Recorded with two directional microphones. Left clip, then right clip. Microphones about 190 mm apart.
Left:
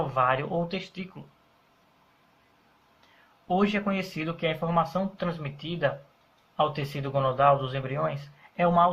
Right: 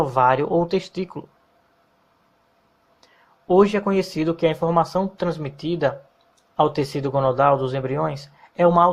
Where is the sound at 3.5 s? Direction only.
45° right (ahead or behind).